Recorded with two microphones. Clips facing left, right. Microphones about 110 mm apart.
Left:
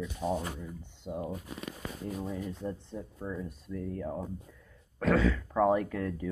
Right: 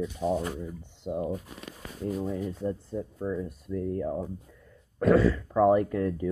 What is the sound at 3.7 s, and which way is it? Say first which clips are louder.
Speech: right 7 dB; 25° right (ahead or behind).